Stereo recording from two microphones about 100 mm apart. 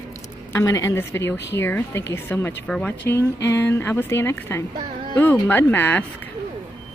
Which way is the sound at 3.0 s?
30° left (ahead or behind).